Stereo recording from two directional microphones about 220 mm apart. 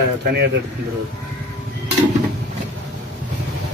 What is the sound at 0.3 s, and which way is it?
Speech, 50° right (ahead or behind).